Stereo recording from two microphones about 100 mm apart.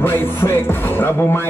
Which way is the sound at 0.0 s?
25° left (ahead or behind).